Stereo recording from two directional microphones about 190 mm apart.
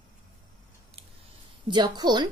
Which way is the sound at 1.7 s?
20° right (ahead or behind).